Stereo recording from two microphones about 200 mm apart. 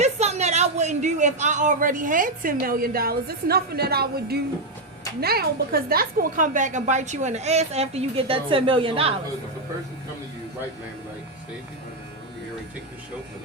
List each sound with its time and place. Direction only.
0.0 s a woman's voice: 35° right (ahead or behind)